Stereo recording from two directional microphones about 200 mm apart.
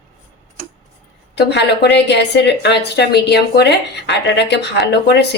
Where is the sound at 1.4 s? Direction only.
55° left (ahead or behind).